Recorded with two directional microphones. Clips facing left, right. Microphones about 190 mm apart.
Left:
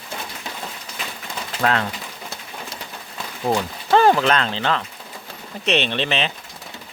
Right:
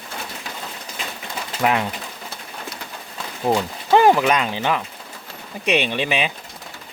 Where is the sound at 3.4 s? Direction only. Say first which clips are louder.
Right 1 dB; 15° right (ahead or behind).